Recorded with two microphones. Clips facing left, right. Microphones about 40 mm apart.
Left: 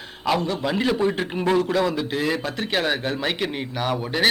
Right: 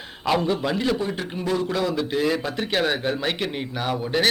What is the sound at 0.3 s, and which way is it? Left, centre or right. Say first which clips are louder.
Speech: right 6 dB; centre.